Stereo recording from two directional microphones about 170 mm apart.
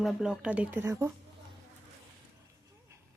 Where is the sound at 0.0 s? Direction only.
Centre (ahead or behind).